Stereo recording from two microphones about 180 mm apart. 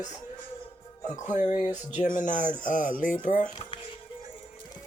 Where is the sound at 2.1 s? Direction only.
45° left (ahead or behind).